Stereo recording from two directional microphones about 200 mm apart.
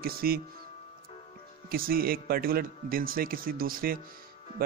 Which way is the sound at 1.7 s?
45° right (ahead or behind).